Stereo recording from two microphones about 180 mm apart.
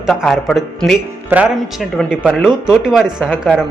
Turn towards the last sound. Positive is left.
turn(degrees=-5)  # may be behind; listen again after turning